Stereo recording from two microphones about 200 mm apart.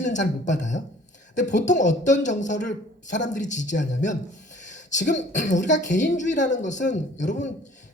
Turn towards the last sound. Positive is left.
turn(degrees=40)  # may be behind; listen again after turning